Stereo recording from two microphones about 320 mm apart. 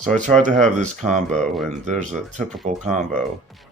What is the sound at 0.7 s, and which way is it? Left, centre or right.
Speech, right.